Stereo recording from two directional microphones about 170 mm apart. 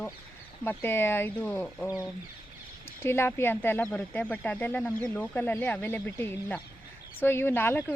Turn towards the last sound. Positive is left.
turn(degrees=15)  # may be behind; listen again after turning